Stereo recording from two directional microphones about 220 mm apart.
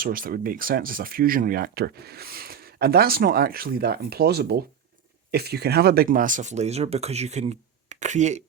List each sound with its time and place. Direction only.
0.0 s speech: 40° right (ahead or behind)